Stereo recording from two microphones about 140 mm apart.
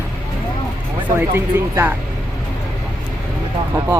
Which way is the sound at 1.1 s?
15° right (ahead or behind).